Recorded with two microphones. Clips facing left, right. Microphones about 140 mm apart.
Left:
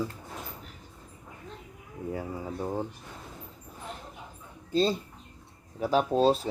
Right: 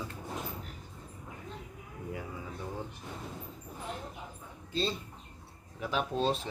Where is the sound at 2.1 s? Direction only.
40° left (ahead or behind).